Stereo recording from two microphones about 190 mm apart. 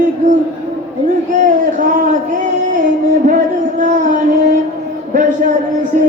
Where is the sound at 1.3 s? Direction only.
45° right (ahead or behind).